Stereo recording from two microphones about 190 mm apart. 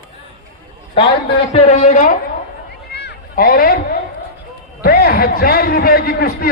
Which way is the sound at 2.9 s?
60° left (ahead or behind).